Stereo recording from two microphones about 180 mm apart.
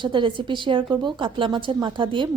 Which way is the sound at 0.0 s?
25° right (ahead or behind).